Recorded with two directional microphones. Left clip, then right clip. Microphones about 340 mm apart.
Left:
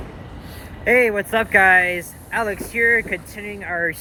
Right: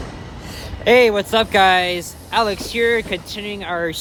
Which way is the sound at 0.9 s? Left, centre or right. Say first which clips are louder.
Right 3 dB; centre.